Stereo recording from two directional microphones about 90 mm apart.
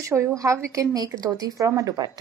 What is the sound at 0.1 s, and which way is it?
Speech, 35° right (ahead or behind).